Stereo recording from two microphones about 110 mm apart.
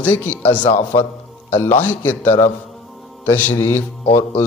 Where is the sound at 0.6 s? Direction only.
90° left.